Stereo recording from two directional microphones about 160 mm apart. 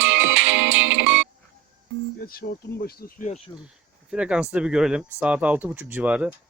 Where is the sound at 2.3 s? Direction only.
75° left (ahead or behind).